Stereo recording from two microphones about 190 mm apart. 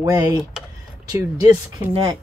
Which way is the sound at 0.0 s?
20° right (ahead or behind).